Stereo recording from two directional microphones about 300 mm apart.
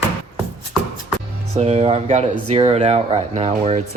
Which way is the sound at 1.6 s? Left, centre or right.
Right.